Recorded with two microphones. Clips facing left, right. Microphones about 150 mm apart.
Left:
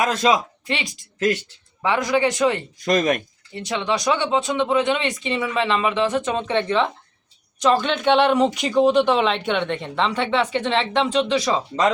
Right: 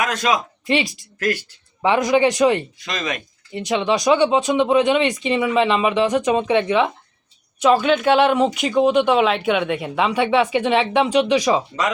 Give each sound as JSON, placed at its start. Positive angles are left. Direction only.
{"t": 0.0, "sound": "speech", "side_deg": 30}
{"t": 1.8, "sound": "speech", "side_deg": -20}
{"t": 2.7, "sound": "speech", "side_deg": 45}
{"t": 3.5, "sound": "speech", "side_deg": -20}